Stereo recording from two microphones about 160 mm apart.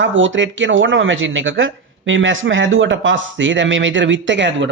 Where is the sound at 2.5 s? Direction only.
90° right.